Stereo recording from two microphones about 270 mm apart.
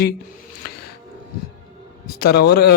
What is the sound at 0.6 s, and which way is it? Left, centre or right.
Music, left.